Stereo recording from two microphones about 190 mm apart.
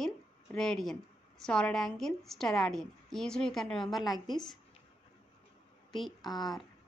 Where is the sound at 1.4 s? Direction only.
5° left (ahead or behind).